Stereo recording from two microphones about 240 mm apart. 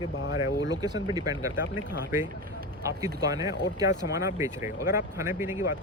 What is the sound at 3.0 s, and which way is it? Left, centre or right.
Speech, centre.